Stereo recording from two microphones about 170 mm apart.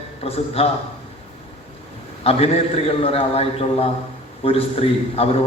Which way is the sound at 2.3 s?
35° left (ahead or behind).